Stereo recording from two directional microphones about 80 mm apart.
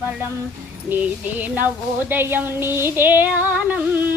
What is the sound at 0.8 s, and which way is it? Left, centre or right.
Speech, right.